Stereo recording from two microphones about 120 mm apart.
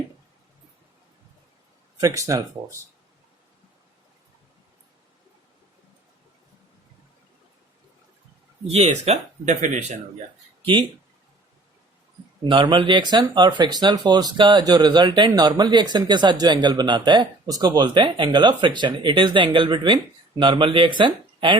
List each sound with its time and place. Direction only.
2.0 s speech: 30° right (ahead or behind)
8.6 s speech: 60° right (ahead or behind); by 10.0 s 85° right
12.5 s speech: 40° right (ahead or behind)